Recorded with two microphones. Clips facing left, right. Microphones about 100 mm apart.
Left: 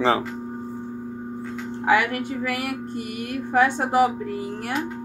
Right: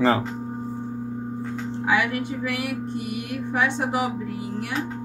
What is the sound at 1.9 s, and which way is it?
Speech, 45° left (ahead or behind).